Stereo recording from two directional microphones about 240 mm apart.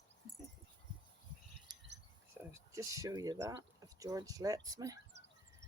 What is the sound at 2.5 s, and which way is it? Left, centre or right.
Speech, centre.